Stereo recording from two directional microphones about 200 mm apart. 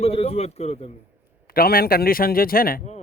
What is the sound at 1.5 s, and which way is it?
Speech, 50° left (ahead or behind).